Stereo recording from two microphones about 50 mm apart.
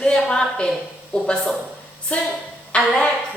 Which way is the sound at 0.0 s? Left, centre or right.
Centre.